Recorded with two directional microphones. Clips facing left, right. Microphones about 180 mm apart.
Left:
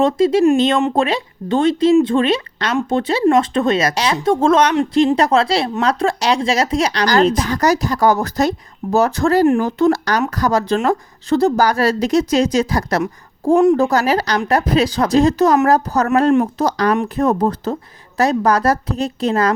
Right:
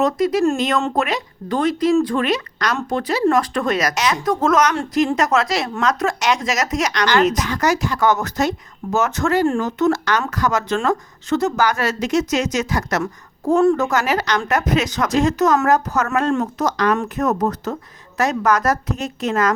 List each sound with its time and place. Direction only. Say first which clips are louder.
0.0 s speech: left 4 dB; 25° left (ahead or behind)
13.5 s speech: left 3 dB; 15° left (ahead or behind)
13.7 s speech: left 4 dB; 35° left (ahead or behind)